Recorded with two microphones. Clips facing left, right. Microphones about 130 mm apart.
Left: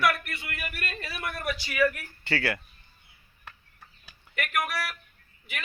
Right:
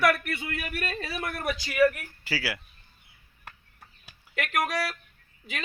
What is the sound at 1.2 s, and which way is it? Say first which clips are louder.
Speech: even; 45° right (ahead or behind).